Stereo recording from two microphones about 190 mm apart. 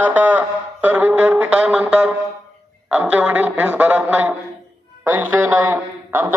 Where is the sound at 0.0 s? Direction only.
10° right (ahead or behind).